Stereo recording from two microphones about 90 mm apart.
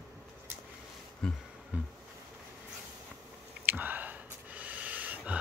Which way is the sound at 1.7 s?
15° right (ahead or behind).